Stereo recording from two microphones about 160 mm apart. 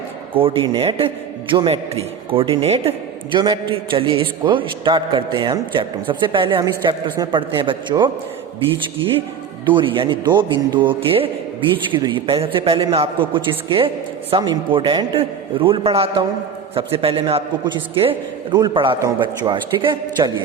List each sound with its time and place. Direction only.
0.3 s a man's voice: 35° right (ahead or behind)
9.6 s a man's voice: 30° right (ahead or behind)